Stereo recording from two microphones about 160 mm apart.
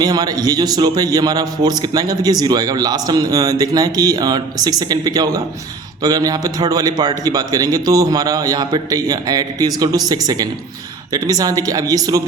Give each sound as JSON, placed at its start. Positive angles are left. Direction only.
{"t": 0.0, "sound": "a man's voice", "side_deg": -25}